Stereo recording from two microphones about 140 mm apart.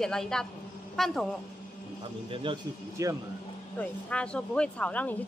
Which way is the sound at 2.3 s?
35° right (ahead or behind).